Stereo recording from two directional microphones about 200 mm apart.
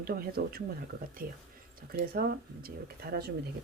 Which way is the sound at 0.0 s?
50° right (ahead or behind).